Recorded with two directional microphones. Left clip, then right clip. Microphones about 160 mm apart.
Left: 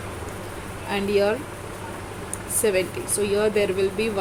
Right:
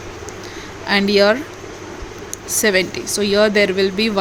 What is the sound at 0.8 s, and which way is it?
Speech, 50° right (ahead or behind).